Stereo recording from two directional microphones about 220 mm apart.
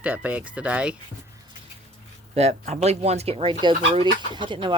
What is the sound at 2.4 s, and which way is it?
Speech, 30° right (ahead or behind).